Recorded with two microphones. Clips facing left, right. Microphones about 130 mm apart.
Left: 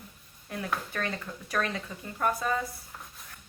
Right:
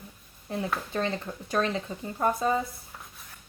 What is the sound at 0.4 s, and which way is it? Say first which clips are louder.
Speech: right 3 dB; 25° right (ahead or behind).